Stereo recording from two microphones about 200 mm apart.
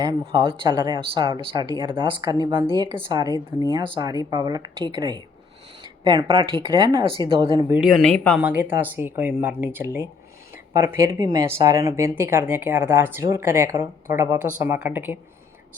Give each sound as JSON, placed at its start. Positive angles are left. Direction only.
{"t": 0.0, "sound": "speech", "side_deg": -20}
{"t": 7.7, "sound": "speech", "side_deg": 0}
{"t": 8.4, "sound": "speech", "side_deg": -10}